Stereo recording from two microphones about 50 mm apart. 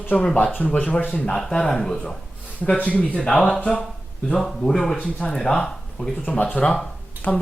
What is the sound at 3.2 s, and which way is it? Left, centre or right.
A man's voice, centre.